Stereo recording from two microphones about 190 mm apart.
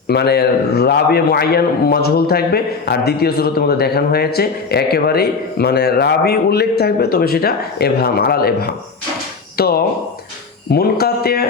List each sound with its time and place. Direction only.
0.1 s a man's voice: 60° left (ahead or behind)